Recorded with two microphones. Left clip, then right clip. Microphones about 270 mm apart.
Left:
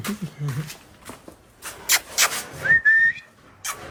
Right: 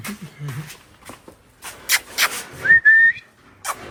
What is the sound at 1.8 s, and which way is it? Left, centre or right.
Rub, centre.